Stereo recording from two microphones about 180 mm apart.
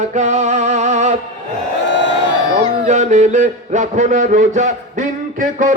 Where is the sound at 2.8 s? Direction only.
40° right (ahead or behind).